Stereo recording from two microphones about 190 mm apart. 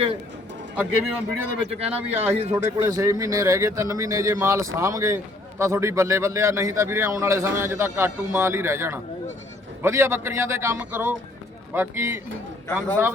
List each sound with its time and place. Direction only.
0.8 s speech: 5° right (ahead or behind)
1.6 s speech: 35° right (ahead or behind)
2.8 s speech: 15° right (ahead or behind)